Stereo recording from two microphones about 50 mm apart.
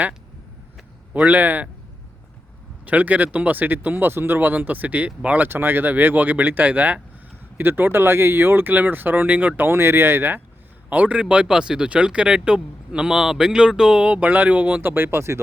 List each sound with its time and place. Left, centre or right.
1.1 s speech: right
2.8 s speech: right
5.5 s speech: right
7.6 s speech: right
9.6 s speech: right
10.8 s speech: right